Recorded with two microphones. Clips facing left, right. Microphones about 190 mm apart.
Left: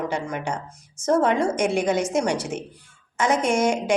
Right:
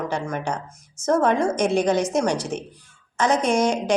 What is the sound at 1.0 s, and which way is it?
Speech, 10° left (ahead or behind).